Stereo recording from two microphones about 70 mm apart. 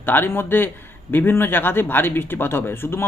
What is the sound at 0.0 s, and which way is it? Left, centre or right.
Speech, left.